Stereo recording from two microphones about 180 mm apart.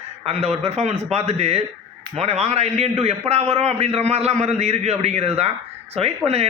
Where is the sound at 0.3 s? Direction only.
35° right (ahead or behind).